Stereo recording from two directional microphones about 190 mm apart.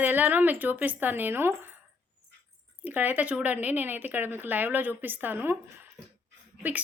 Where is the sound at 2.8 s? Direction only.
10° right (ahead or behind).